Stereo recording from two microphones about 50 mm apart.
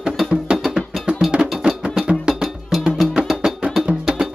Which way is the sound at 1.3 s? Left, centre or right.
Centre.